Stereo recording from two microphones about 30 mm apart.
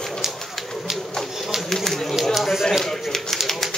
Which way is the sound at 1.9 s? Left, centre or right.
Centre.